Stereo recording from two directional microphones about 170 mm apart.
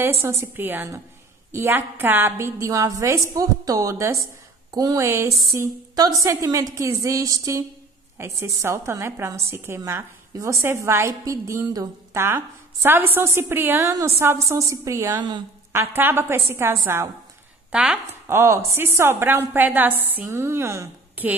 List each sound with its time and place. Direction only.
0.2 s a woman's voice: 15° right (ahead or behind)